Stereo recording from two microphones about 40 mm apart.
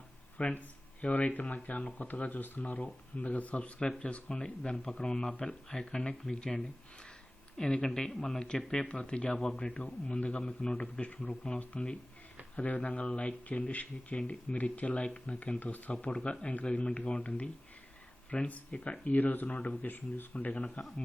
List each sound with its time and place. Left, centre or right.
0.4 s speech: left
3.8 s speech: left
8.9 s speech: left
15.4 s speech: left
16.0 s speech: left
19.0 s speech: left
19.5 s speech: left